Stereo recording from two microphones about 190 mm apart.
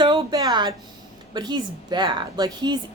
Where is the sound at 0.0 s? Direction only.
25° right (ahead or behind).